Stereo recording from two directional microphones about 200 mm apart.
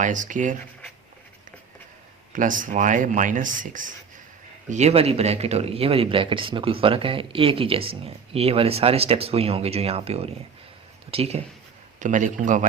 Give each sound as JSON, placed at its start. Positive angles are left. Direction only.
{"t": 0.0, "sound": "speech", "side_deg": -40}
{"t": 2.3, "sound": "speech", "side_deg": -40}